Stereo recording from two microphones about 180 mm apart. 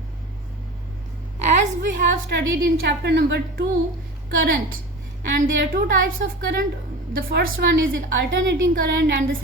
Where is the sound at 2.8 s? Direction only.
65° right (ahead or behind).